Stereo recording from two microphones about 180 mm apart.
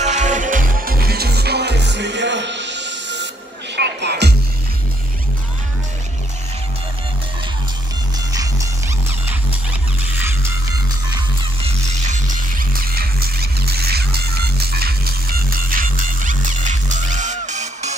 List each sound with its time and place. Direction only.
0.0 s music: 40° right (ahead or behind); by 4.4 s 65° right (ahead or behind)
8.3 s music: 20° right (ahead or behind)
15.5 s music: 50° right (ahead or behind)